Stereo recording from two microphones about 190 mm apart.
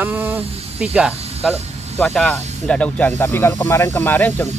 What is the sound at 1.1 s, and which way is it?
Snake, 35° right (ahead or behind).